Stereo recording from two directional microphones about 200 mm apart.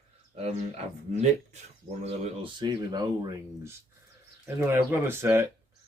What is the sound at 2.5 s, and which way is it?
Speech, 20° right (ahead or behind).